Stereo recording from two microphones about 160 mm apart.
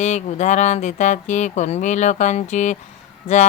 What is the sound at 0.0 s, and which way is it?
Speech, 45° left (ahead or behind).